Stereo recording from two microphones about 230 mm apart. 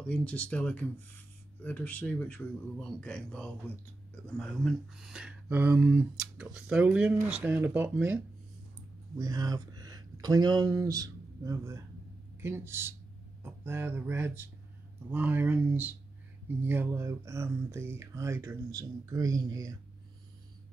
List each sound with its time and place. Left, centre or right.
0.0 s speech: centre
9.2 s a sound: centre
10.2 s a man's voice: centre